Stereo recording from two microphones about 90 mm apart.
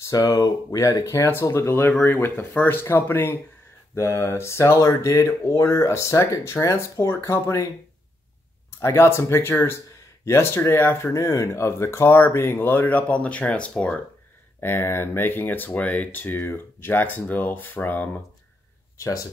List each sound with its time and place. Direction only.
0.1 s speech: 35° left (ahead or behind)
8.7 s speech: 30° left (ahead or behind)
14.6 s speech: 25° left (ahead or behind)
18.9 s speech: 40° left (ahead or behind)